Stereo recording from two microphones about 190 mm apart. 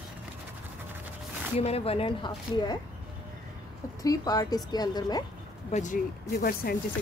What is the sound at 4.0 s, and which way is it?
A woman's voice, 20° left (ahead or behind).